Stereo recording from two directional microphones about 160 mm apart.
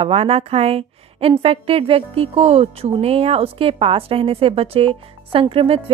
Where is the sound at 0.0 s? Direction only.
40° right (ahead or behind).